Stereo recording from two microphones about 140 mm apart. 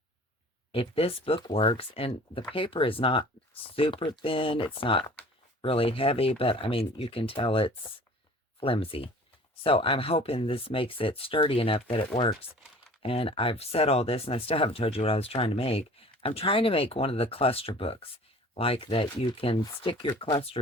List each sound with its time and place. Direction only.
0.7 s speech: 40° left (ahead or behind)